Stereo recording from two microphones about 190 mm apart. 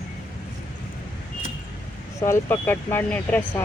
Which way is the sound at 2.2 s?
15° left (ahead or behind).